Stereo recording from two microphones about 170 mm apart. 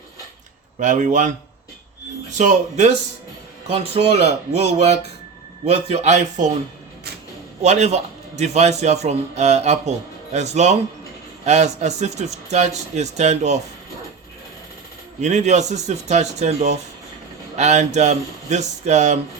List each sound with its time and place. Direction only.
0.8 s a man's voice: 45° right (ahead or behind)
2.4 s a man's voice: 45° right (ahead or behind)
7.6 s a man's voice: 40° right (ahead or behind)
15.2 s a man's voice: 40° right (ahead or behind)